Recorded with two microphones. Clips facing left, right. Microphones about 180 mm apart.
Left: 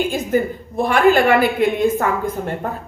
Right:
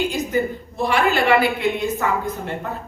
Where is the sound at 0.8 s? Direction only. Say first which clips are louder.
Left 5 dB; 50° left (ahead or behind).